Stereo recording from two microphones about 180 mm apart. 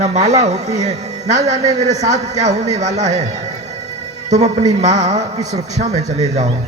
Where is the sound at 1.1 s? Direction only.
20° right (ahead or behind).